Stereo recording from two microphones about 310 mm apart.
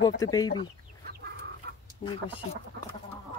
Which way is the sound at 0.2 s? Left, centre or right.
Centre.